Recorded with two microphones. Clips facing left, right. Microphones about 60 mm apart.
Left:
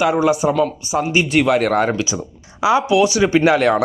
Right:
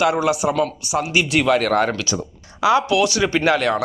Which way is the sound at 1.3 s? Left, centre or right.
Centre.